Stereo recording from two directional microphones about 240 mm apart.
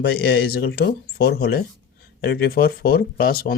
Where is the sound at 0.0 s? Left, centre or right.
Left.